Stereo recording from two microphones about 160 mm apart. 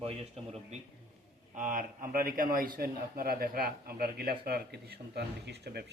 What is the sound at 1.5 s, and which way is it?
A man's voice, 55° right (ahead or behind).